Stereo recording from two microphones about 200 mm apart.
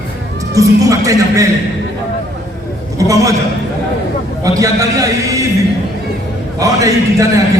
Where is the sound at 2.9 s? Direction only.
15° right (ahead or behind).